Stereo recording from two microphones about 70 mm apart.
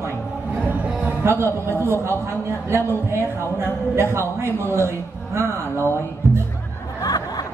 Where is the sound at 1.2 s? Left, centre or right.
Right.